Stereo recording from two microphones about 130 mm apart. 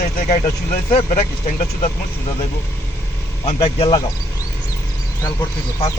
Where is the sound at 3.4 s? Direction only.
45° left (ahead or behind).